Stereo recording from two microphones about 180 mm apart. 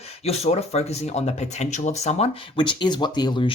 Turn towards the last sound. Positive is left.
turn(degrees=25)  # may be behind; listen again after turning